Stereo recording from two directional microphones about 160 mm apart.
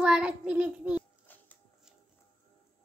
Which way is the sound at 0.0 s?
5° right (ahead or behind).